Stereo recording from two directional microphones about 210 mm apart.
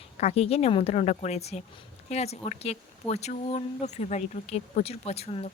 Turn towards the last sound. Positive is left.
turn(degrees=30)  # may be behind; listen again after turning